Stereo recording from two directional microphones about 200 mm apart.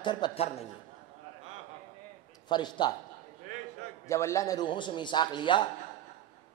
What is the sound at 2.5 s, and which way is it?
Speech, 20° left (ahead or behind).